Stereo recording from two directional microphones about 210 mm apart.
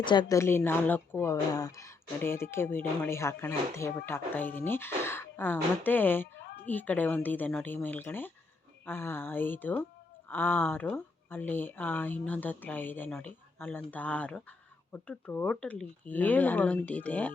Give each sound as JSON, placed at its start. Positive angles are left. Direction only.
{"t": 0.0, "sound": "a woman's voice", "side_deg": 20}
{"t": 6.4, "sound": "a sound", "side_deg": 50}
{"t": 6.7, "sound": "a woman's voice", "side_deg": 10}